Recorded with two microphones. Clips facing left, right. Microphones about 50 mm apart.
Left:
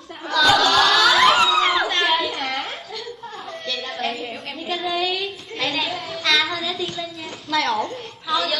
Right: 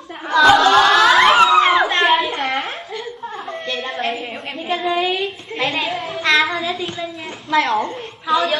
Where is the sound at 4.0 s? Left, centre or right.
Centre.